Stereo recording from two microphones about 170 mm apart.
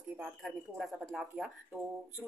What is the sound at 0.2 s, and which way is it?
Speech, centre (ahead or behind).